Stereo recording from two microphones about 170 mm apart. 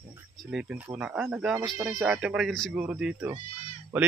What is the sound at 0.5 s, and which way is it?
A man's voice, 5° right (ahead or behind).